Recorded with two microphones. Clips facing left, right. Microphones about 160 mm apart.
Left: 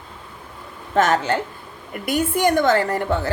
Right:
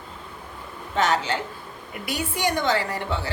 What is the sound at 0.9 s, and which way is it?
A woman's voice, 50° left (ahead or behind).